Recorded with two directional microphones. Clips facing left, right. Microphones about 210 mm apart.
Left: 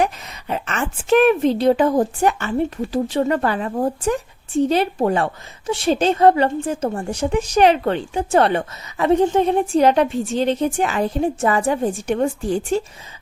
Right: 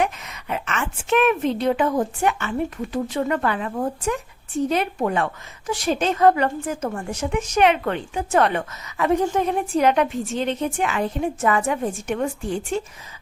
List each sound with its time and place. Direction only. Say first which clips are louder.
0.0 s a woman's voice: left 3 dB; 35° left (ahead or behind)